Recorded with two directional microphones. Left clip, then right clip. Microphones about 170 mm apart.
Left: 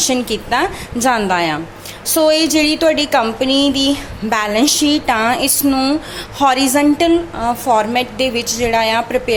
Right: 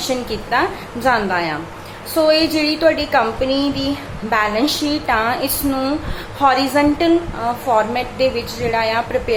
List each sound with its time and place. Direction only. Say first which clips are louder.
0.1 s a woman's voice: left 2 dB; 50° left (ahead or behind)